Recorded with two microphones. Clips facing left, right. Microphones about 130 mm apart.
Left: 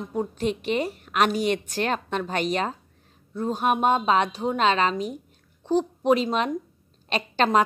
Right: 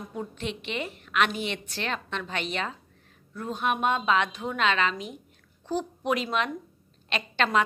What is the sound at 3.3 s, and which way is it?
Speech, 25° left (ahead or behind).